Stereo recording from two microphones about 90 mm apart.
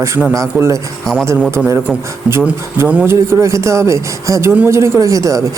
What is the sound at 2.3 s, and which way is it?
Speech, 10° right (ahead or behind).